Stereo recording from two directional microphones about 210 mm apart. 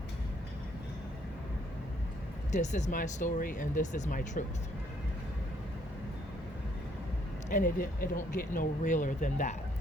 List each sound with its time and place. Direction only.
2.5 s speech: 35° left (ahead or behind)
7.5 s speech: 40° left (ahead or behind)